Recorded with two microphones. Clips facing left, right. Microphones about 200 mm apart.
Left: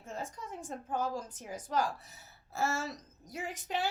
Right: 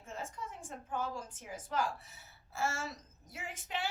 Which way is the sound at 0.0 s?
40° left (ahead or behind).